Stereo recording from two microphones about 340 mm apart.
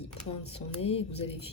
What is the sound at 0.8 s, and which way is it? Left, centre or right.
Speech, centre.